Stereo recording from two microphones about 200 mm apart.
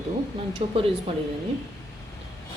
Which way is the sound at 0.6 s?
30° right (ahead or behind).